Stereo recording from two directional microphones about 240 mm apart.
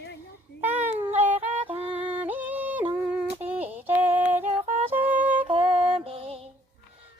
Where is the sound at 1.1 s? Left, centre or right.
Right.